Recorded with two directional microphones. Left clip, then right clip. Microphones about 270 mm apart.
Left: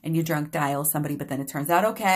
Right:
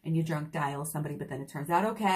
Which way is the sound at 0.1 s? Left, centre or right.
Left.